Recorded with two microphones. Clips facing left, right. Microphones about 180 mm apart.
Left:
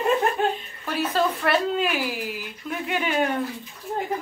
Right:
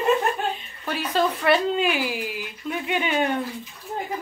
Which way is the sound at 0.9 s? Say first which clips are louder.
Even; centre (ahead or behind).